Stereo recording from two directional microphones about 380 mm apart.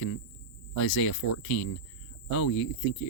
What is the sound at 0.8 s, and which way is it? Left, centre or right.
Speech, left.